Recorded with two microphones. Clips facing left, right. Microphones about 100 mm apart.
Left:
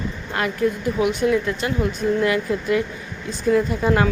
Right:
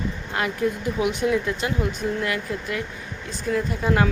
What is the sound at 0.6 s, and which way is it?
Speech, 15° right (ahead or behind).